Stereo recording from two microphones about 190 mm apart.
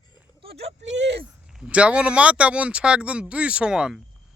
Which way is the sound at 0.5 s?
70° right (ahead or behind).